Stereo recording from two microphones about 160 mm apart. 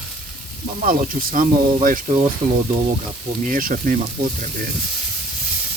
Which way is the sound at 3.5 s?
60° right (ahead or behind).